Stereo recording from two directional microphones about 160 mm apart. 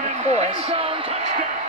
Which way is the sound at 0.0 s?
45° right (ahead or behind).